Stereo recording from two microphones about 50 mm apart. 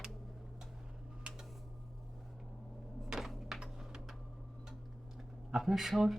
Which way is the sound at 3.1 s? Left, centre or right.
Centre.